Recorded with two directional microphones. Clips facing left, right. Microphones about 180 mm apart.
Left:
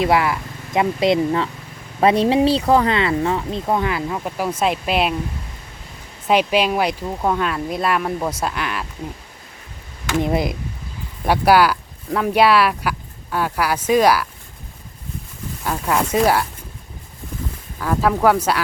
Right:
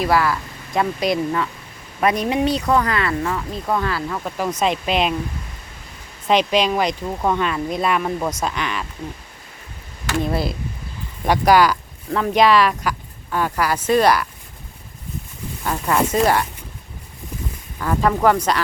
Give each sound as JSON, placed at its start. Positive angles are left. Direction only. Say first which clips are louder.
{"t": 0.0, "sound": "speech", "louder": "left 1 dB", "side_deg": 20}
{"t": 6.2, "sound": "speech", "louder": "even", "side_deg": 10}
{"t": 10.1, "sound": "speech", "louder": "left 2 dB", "side_deg": 20}
{"t": 15.6, "sound": "speech", "louder": "right 1 dB", "side_deg": 5}
{"t": 17.7, "sound": "speech", "louder": "even", "side_deg": 5}